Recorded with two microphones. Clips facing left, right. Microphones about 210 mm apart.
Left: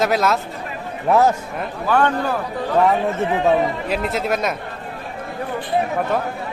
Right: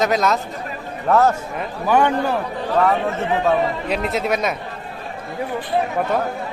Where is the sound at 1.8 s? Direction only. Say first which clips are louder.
Right 1 dB; 15° right (ahead or behind).